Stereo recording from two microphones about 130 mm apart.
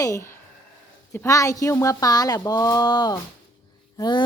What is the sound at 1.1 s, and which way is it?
Speech, 20° left (ahead or behind).